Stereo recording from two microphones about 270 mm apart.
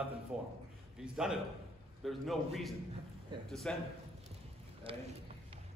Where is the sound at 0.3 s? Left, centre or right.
Centre.